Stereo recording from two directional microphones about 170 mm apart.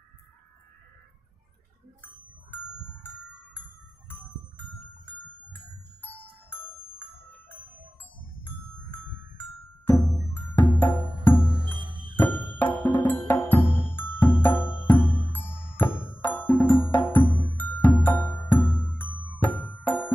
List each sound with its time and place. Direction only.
6.5 s music: 10° left (ahead or behind)
9.4 s music: 10° left (ahead or behind)
11.5 s music: 30° right (ahead or behind)
12.1 s music: 10° left (ahead or behind)